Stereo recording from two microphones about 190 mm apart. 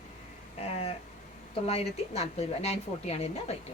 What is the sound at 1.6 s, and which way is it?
Speech, 35° left (ahead or behind).